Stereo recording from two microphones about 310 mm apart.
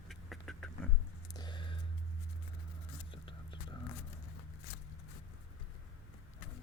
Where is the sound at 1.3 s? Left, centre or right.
Centre.